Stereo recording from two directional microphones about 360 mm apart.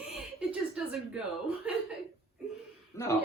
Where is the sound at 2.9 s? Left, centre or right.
Centre.